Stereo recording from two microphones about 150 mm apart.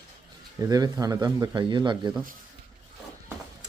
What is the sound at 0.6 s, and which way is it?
Speech, 25° right (ahead or behind).